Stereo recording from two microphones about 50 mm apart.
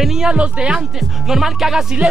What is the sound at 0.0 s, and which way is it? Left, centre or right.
Speech, centre.